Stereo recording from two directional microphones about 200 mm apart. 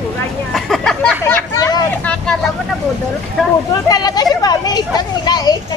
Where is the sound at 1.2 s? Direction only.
15° left (ahead or behind).